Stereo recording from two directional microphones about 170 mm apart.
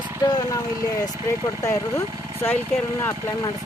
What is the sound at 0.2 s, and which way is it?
Speech, 25° left (ahead or behind).